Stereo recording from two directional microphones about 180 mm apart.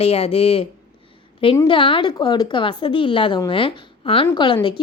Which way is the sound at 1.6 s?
30° left (ahead or behind).